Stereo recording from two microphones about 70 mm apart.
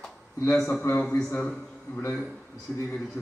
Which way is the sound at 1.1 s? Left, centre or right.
Left.